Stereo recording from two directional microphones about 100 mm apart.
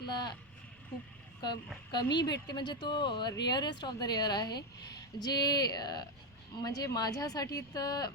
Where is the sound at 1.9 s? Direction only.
45° left (ahead or behind).